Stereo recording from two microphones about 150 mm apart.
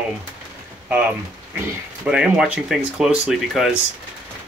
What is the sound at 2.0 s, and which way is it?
Speech, 5° right (ahead or behind).